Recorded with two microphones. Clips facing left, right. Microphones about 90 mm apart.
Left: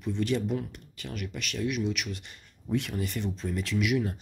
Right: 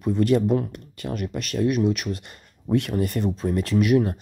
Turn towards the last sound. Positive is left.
turn(degrees=-50)  # may be behind; listen again after turning